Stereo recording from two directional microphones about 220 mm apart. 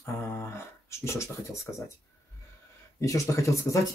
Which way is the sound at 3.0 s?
15° left (ahead or behind).